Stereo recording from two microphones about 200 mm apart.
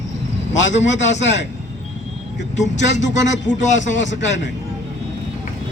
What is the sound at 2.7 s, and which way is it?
Speech, 65° left (ahead or behind).